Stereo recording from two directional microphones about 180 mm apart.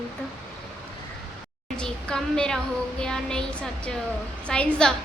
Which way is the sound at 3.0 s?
5° left (ahead or behind).